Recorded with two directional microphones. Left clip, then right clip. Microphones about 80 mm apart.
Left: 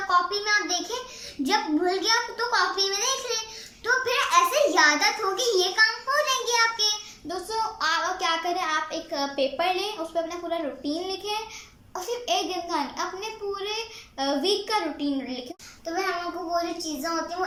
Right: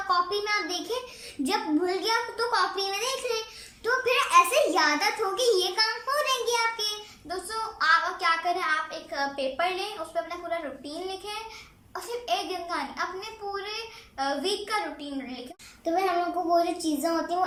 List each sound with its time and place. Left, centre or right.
0.1 s a child's voice: centre
7.8 s a child's voice: left
16.5 s a child's voice: right